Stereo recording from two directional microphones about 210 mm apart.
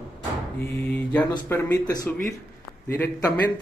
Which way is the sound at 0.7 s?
5° left (ahead or behind).